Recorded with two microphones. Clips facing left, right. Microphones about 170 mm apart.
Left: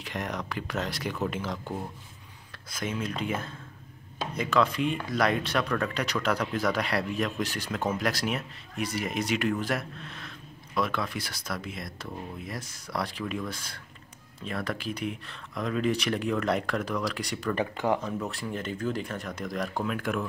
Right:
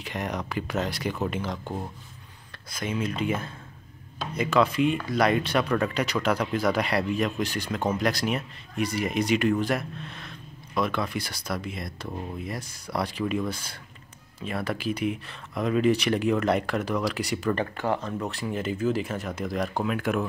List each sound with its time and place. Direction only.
0.0 s speech: 5° right (ahead or behind)
2.7 s speech: centre (ahead or behind)
17.6 s speech: 15° left (ahead or behind)
18.3 s speech: 5° right (ahead or behind)